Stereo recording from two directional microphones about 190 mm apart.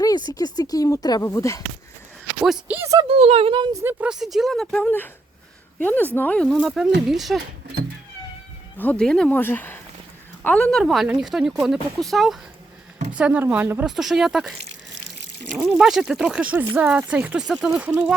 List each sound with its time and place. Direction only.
0.0 s a sound: 20° left (ahead or behind)
0.3 s speech: 20° left (ahead or behind)
2.4 s speech: 5° right (ahead or behind)
3.1 s speech: 30° right (ahead or behind); by 7.4 s centre (ahead or behind)
8.8 s speech: 5° left (ahead or behind)
15.5 s speech: centre (ahead or behind)